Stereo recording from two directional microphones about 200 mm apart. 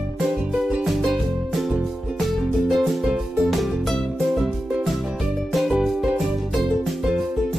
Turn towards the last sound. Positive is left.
turn(degrees=0)  # may be behind; listen again after turning